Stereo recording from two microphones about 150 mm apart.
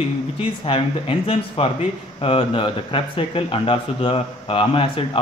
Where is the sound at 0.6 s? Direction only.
35° left (ahead or behind).